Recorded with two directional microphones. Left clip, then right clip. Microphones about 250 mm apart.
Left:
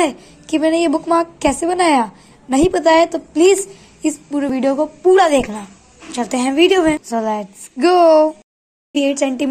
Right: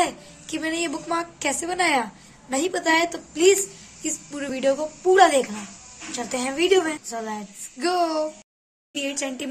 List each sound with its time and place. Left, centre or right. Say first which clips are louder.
0.0 s a woman's voice: left 6 dB; left